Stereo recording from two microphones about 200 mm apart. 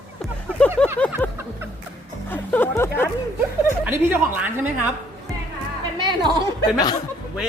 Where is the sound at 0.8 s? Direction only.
5° left (ahead or behind).